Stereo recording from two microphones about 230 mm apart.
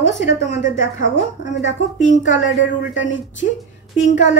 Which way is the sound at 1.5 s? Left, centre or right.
Left.